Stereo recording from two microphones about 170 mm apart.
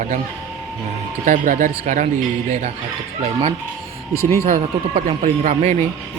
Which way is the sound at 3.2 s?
40° right (ahead or behind).